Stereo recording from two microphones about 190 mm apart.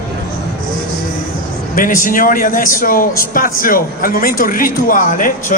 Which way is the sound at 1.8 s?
45° left (ahead or behind).